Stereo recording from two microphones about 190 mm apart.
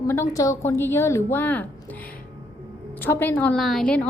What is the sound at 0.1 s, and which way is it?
A woman's voice, 15° left (ahead or behind).